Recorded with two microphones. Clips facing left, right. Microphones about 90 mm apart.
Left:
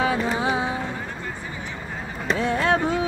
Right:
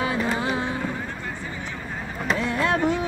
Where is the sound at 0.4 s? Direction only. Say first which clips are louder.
Left 2 dB; 15° left (ahead or behind).